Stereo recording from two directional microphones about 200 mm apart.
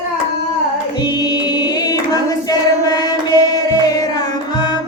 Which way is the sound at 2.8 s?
20° left (ahead or behind).